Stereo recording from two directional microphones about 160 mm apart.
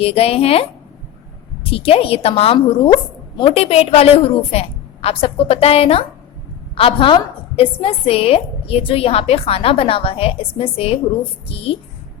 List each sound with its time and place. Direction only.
0.0 s a woman's voice: 40° left (ahead or behind)